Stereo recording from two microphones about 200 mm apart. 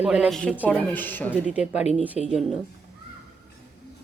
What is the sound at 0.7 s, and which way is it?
Speech, 5° left (ahead or behind).